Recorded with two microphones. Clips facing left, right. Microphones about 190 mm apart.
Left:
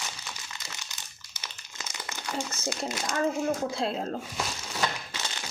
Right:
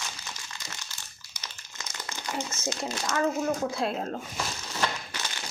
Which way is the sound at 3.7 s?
30° left (ahead or behind).